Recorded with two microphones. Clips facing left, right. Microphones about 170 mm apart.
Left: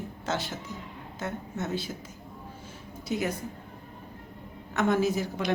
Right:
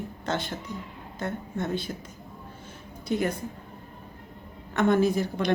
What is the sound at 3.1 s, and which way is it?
Speech, 5° left (ahead or behind).